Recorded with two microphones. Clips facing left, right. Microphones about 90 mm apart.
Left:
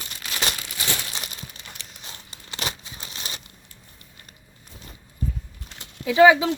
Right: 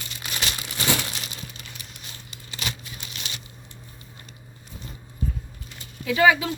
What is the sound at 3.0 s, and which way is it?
Crumpling, 35° left (ahead or behind).